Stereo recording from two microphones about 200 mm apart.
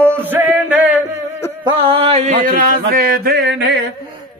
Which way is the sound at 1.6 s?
25° right (ahead or behind).